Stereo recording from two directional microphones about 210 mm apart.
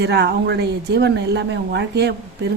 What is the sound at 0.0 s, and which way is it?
A woman's voice, 55° right (ahead or behind).